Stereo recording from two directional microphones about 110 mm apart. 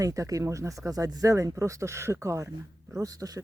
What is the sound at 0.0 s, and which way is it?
Speech, 30° right (ahead or behind).